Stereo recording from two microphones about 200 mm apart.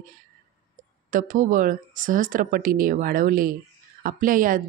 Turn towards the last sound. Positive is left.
turn(degrees=-45)  # may be behind; listen again after turning